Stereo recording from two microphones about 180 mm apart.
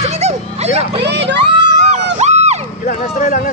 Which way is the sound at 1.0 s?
70° right (ahead or behind).